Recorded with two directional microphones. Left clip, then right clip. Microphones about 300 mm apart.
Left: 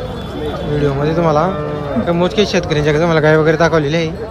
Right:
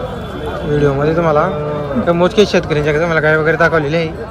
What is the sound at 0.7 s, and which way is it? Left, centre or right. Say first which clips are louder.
Speech: right 3 dB; centre.